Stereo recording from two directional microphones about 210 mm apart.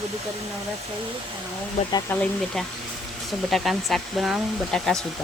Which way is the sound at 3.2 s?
Centre (ahead or behind).